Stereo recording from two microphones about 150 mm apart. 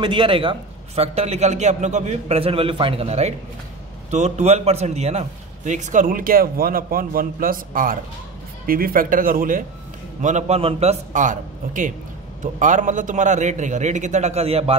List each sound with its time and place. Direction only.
0.0 s a man's voice: 35° right (ahead or behind); by 9.7 s 65° right (ahead or behind)
10.2 s a man's voice: 50° right (ahead or behind)